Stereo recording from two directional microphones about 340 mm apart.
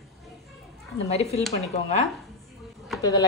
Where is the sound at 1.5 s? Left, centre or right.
Centre.